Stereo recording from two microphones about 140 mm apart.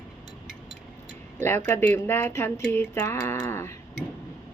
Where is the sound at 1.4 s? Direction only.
15° left (ahead or behind).